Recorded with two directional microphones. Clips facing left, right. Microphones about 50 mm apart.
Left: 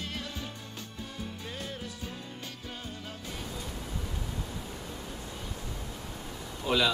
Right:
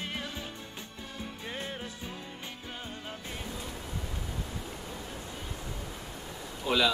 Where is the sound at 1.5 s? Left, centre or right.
Right.